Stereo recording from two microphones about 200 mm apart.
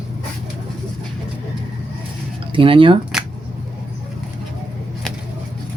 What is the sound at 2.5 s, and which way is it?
Speech, 25° right (ahead or behind).